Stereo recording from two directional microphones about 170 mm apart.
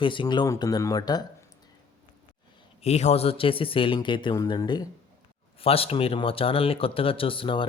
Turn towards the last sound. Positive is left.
turn(degrees=30)  # may be behind; listen again after turning